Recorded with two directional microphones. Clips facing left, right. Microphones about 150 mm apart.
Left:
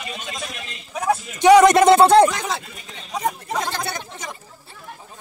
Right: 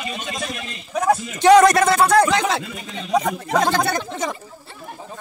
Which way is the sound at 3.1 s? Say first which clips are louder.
Right 5 dB; 90° right.